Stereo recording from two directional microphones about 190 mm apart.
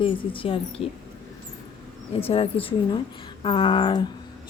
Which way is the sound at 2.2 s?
30° left (ahead or behind).